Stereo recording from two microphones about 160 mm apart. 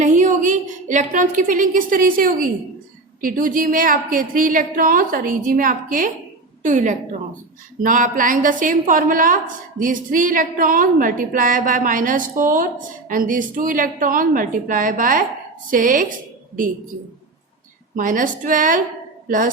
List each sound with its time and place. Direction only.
0.0 s a woman's voice: 50° right (ahead or behind)
17.9 s a woman's voice: 55° right (ahead or behind)